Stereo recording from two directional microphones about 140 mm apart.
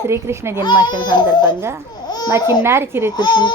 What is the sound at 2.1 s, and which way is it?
Babbling, 30° left (ahead or behind).